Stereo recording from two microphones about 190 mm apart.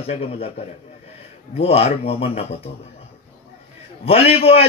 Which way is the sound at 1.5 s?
30° left (ahead or behind).